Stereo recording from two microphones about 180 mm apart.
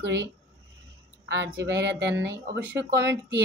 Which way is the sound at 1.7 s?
75° right (ahead or behind).